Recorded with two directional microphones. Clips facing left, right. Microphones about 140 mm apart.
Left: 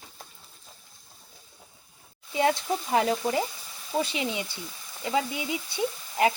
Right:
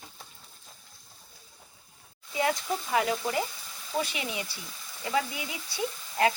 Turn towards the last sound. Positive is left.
turn(degrees=20)  # may be behind; listen again after turning